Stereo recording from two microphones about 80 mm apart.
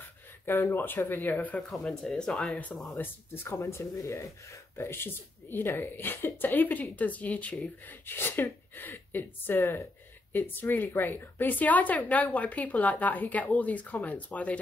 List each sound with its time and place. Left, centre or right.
0.5 s speech: left
1.7 s speech: centre
2.7 s speech: centre
3.0 s speech: left; by 14.6 s centre